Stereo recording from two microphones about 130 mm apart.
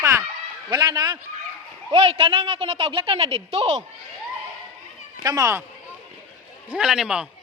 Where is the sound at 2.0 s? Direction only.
45° right (ahead or behind).